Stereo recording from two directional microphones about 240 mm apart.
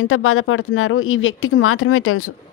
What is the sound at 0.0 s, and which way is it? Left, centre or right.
Speech, left.